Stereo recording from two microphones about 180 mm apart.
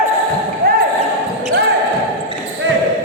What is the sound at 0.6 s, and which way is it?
Basketball bounce, 55° right (ahead or behind).